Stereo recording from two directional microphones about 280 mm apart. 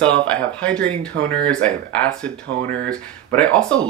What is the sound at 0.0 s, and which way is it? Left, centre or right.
Speech, centre.